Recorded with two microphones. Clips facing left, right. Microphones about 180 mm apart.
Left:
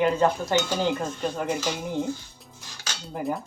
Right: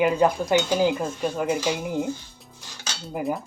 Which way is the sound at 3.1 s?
Centre (ahead or behind).